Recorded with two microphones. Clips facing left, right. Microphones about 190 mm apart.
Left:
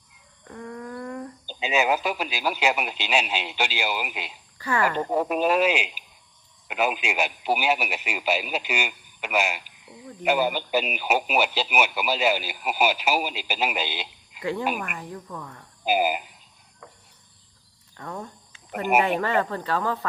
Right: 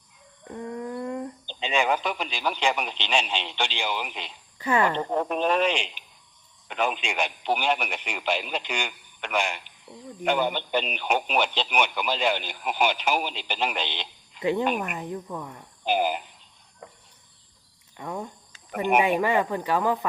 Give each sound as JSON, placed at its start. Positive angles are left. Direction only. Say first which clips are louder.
{"t": 0.4, "sound": "a sound", "louder": "right 3 dB", "side_deg": -20}
{"t": 1.5, "sound": "speech", "louder": "left 2 dB", "side_deg": 5}
{"t": 4.5, "sound": "speech", "louder": "right 2 dB", "side_deg": -20}
{"t": 4.9, "sound": "speech", "louder": "left 2 dB", "side_deg": 5}
{"t": 14.8, "sound": "a woman's voice", "louder": "right 4 dB", "side_deg": -20}
{"t": 15.8, "sound": "speech", "louder": "left 1 dB", "side_deg": 5}
{"t": 17.9, "sound": "speech", "louder": "right 2 dB", "side_deg": -15}
{"t": 18.7, "sound": "speech", "louder": "even", "side_deg": 5}
{"t": 19.0, "sound": "speech", "louder": "right 1 dB", "side_deg": -15}